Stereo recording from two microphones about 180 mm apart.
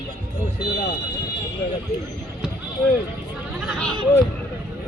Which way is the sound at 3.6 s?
5° left (ahead or behind).